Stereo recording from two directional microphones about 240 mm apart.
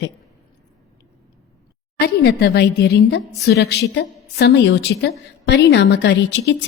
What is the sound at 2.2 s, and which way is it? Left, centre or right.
A woman's voice, left.